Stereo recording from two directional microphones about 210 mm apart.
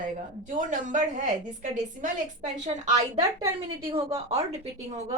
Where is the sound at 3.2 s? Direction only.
15° right (ahead or behind).